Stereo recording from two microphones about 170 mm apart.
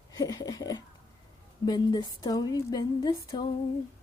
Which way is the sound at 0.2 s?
25° left (ahead or behind).